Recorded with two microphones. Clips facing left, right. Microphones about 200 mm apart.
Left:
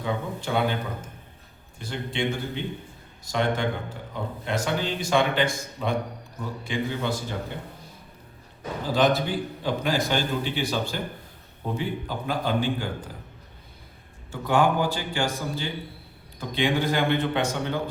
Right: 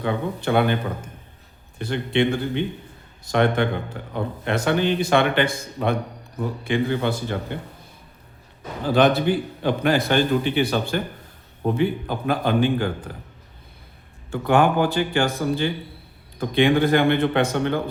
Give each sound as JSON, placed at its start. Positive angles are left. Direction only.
{"t": 0.0, "sound": "speech", "side_deg": -65}
{"t": 1.8, "sound": "speech", "side_deg": -60}
{"t": 3.3, "sound": "speech", "side_deg": -60}
{"t": 8.9, "sound": "speech", "side_deg": -60}
{"t": 14.3, "sound": "speech", "side_deg": -60}